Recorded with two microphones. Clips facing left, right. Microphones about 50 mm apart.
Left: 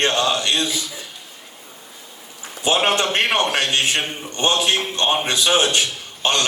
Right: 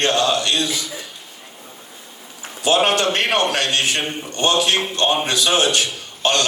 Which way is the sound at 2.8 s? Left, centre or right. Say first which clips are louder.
Even; left.